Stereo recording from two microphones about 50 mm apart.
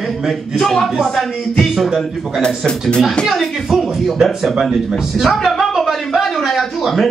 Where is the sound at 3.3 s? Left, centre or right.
Centre.